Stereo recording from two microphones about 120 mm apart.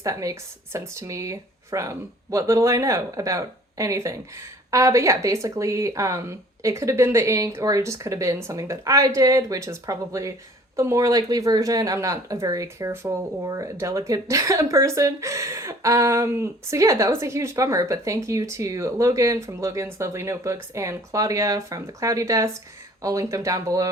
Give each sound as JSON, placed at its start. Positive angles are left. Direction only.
{"t": 0.0, "sound": "speech", "side_deg": -25}